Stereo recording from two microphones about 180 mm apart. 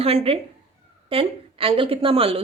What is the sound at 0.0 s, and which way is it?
A woman's voice, 35° right (ahead or behind).